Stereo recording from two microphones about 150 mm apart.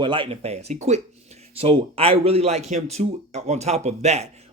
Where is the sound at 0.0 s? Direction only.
35° right (ahead or behind).